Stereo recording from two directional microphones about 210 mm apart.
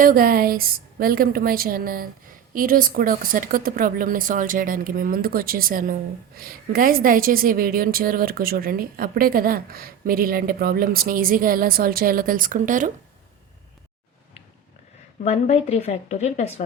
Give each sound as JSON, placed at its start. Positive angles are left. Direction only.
{"t": 0.0, "sound": "speech", "side_deg": -45}
{"t": 15.2, "sound": "speech", "side_deg": 30}